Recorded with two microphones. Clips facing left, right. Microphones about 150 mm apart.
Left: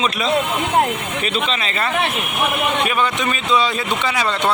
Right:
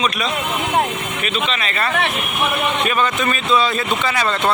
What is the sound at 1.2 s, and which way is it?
Speech, 25° left (ahead or behind).